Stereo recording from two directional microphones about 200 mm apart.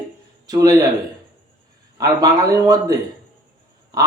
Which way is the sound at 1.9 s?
20° right (ahead or behind).